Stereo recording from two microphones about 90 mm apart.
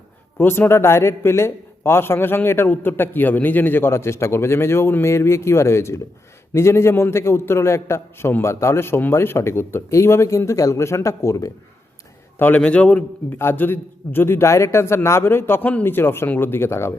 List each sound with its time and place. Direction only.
0.3 s a man's voice: 25° left (ahead or behind)
12.4 s a man's voice: 15° left (ahead or behind)